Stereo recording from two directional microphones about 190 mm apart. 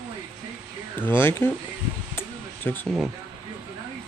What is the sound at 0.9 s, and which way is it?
Speech, 10° left (ahead or behind).